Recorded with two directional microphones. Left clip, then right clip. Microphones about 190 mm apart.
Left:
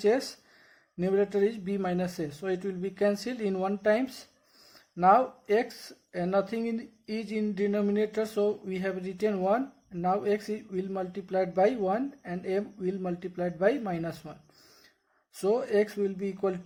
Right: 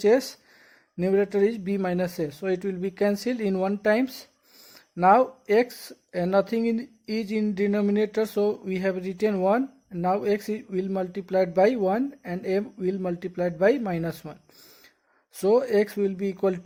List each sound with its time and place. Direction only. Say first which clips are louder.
0.0 s speech: right 5 dB; 35° right (ahead or behind)
15.4 s speech: right 5 dB; 35° right (ahead or behind)